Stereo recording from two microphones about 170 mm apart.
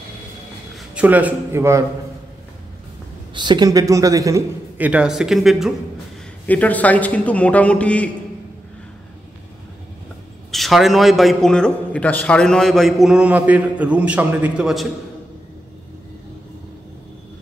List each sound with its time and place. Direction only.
0.7 s speech: 10° right (ahead or behind)
3.3 s a man's voice: 25° right (ahead or behind); by 5.7 s centre (ahead or behind)
6.4 s a man's voice: 10° left (ahead or behind)
10.5 s a man's voice: centre (ahead or behind)